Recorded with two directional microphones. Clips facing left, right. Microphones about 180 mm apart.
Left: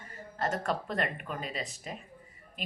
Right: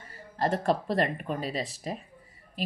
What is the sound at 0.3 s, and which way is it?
A woman's voice, 35° right (ahead or behind).